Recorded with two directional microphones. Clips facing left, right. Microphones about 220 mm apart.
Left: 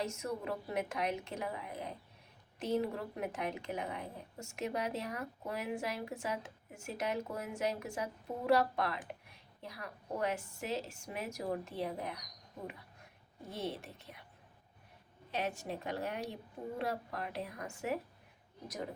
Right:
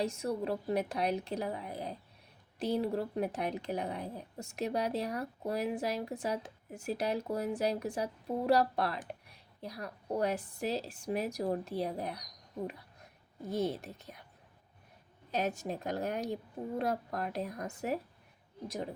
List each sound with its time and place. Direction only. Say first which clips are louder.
0.0 s speech: right 5 dB; 35° right (ahead or behind)
13.5 s speech: right 7 dB; 40° right (ahead or behind)
15.3 s speech: right 4 dB; 40° right (ahead or behind)